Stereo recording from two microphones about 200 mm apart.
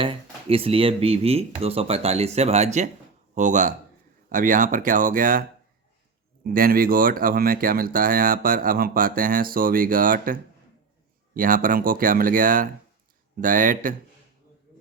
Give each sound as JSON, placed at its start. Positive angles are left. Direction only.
{"t": 0.0, "sound": "speech", "side_deg": -25}
{"t": 11.3, "sound": "speech", "side_deg": -45}